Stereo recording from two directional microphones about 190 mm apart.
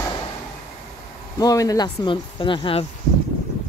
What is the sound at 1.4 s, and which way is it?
Speech, 20° left (ahead or behind).